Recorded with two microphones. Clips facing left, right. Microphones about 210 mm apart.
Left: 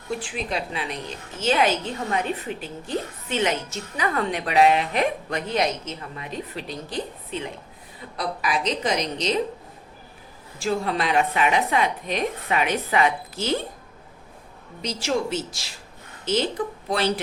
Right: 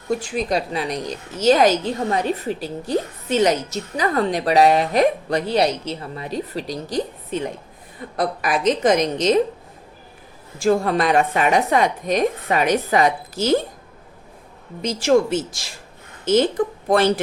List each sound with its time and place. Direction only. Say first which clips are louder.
0.1 s a woman's voice: right 7 dB; 40° right (ahead or behind)
10.6 s a woman's voice: right 7 dB; 45° right (ahead or behind)
14.8 s a woman's voice: right 8 dB; 50° right (ahead or behind)